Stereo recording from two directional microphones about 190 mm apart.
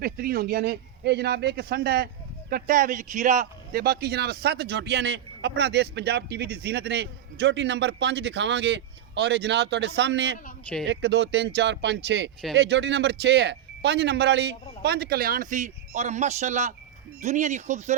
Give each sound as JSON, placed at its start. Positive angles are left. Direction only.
{"t": 0.0, "sound": "speech", "side_deg": -50}